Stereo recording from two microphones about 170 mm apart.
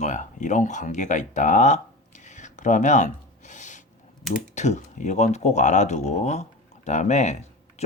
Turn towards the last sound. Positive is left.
turn(degrees=40)  # may be behind; listen again after turning